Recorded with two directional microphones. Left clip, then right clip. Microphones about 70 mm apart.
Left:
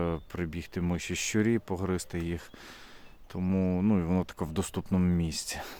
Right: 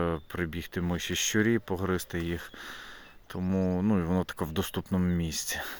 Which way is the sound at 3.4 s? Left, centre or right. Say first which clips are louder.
Right 1 dB; left.